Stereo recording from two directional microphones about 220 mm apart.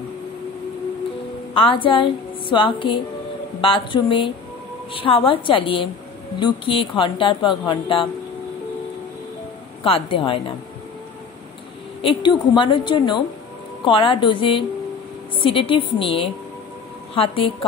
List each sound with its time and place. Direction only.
1.5 s speech: 25° left (ahead or behind)
9.8 s speech: 25° left (ahead or behind)
12.0 s speech: 20° left (ahead or behind)